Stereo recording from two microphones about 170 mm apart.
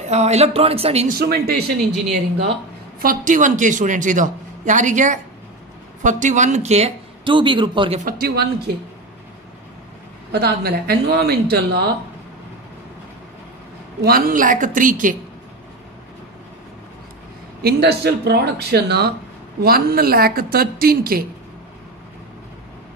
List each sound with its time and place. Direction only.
0.0 s speech: 40° right (ahead or behind)
1.0 s speech: 65° right (ahead or behind)
3.0 s a man's voice: 50° right (ahead or behind); by 8.0 s 30° right (ahead or behind)
8.0 s a woman's voice: 60° right (ahead or behind)
10.3 s speech: 70° right (ahead or behind)
14.0 s a man's voice: 60° right (ahead or behind)
17.6 s a woman's voice: 70° right (ahead or behind)